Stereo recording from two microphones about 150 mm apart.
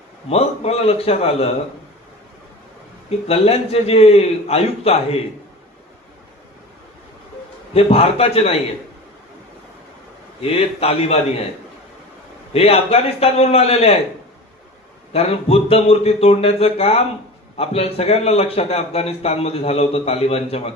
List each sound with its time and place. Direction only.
0.3 s a man's voice: 40° left (ahead or behind)
3.1 s a man's voice: 40° left (ahead or behind)
7.7 s a man's voice: 40° left (ahead or behind)
10.4 s a man's voice: 40° left (ahead or behind)
12.5 s a man's voice: 40° left (ahead or behind)
15.1 s a man's voice: 40° left (ahead or behind)